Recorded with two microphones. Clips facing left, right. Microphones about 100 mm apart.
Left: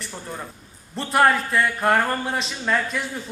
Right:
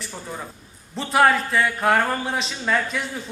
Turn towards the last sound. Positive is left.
turn(degrees=0)  # may be behind; listen again after turning